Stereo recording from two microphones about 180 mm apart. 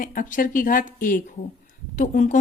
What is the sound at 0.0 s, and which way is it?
A woman's voice, 50° left (ahead or behind).